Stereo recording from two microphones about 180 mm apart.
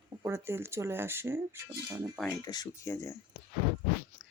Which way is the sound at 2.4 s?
20° left (ahead or behind).